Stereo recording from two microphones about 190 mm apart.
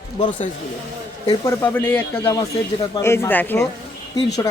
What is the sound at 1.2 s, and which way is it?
Speech, 15° left (ahead or behind).